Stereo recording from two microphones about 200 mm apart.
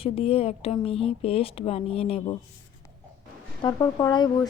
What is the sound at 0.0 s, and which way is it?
Speech, 30° left (ahead or behind).